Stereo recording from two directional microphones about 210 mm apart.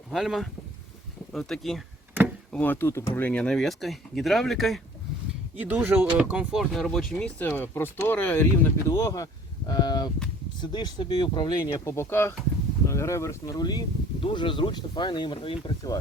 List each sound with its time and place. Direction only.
0.1 s speech: centre (ahead or behind)
1.3 s a sound: centre (ahead or behind)
3.2 s speech: 5° left (ahead or behind)